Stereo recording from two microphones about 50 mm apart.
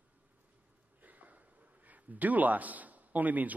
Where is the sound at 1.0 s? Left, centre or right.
Right.